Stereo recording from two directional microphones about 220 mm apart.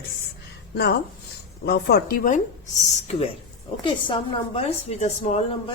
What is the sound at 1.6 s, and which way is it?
Speech, 45° left (ahead or behind).